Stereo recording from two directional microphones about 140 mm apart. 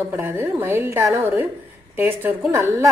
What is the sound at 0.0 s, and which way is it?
A woman's voice, 15° right (ahead or behind).